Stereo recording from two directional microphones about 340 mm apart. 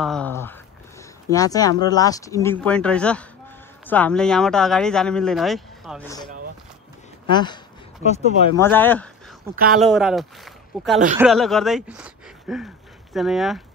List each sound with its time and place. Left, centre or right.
0.0 s speech: centre
8.5 s speech: centre
9.6 s speech: right
9.8 s speech: centre